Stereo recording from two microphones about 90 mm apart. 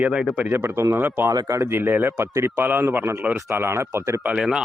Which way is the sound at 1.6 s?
25° right (ahead or behind).